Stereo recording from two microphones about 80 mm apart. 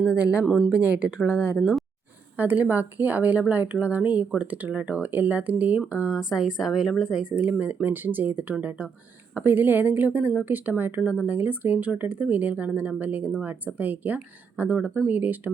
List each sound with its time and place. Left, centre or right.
0.2 s speech: centre
0.4 s speech: centre
0.7 s speech: centre